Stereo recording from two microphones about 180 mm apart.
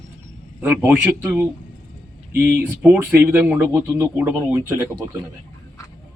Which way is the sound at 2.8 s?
10° right (ahead or behind).